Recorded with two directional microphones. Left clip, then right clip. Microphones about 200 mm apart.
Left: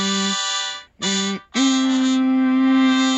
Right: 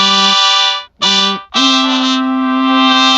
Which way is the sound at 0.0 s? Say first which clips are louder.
Right 13 dB; 35° right (ahead or behind).